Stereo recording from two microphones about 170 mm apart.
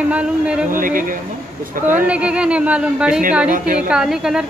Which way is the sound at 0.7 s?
55° right (ahead or behind).